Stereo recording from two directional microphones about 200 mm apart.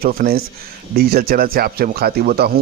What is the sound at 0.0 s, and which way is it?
Speech, 50° right (ahead or behind).